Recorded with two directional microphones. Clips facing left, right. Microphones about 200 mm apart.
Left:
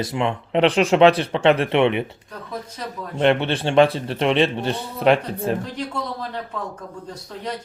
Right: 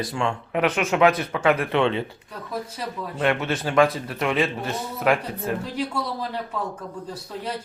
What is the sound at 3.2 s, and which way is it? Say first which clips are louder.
Speech: left 5 dB; 30° left (ahead or behind).